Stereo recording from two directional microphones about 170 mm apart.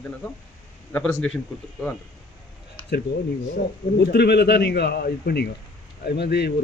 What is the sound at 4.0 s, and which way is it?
Speech, 75° left (ahead or behind).